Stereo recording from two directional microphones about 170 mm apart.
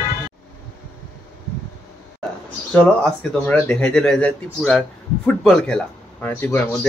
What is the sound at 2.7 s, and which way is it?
Speech, 5° left (ahead or behind).